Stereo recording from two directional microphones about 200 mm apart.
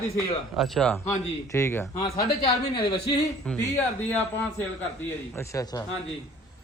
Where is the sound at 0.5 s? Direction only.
Centre (ahead or behind); by 2.5 s 20° left (ahead or behind).